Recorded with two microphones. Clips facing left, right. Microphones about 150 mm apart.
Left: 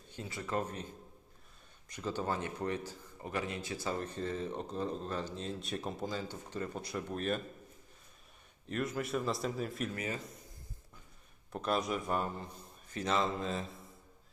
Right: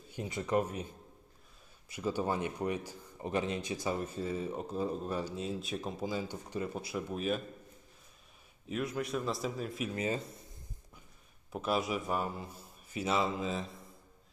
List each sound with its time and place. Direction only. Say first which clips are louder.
0.1 s speech: right 5 dB; 20° right (ahead or behind); by 7.4 s 5° right (ahead or behind)
8.7 s a man's voice: even; centre (ahead or behind)
9.9 s speech: right 5 dB; 25° right (ahead or behind)
11.5 s a man's voice: right 1 dB; 5° right (ahead or behind)